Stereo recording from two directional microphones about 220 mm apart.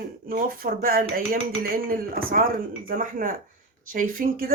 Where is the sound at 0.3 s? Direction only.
40° right (ahead or behind).